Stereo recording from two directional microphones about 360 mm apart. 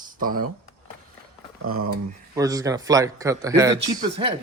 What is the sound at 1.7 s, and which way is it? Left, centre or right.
Speech, right.